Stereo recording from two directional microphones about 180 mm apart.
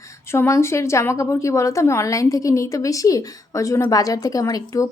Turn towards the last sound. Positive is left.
turn(degrees=20)  # may be behind; listen again after turning